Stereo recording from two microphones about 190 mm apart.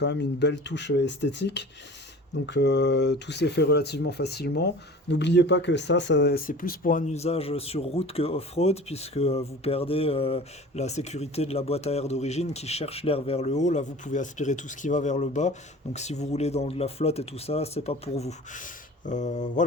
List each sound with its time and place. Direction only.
0.0 s speech: 65° left (ahead or behind); by 19.6 s 40° left (ahead or behind)